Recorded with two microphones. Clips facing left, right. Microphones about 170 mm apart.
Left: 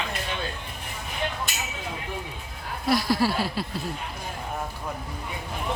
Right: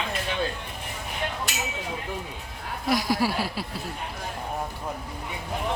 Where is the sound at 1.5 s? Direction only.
90° right.